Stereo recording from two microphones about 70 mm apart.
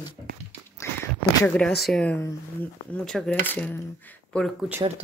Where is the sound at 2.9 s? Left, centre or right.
Centre.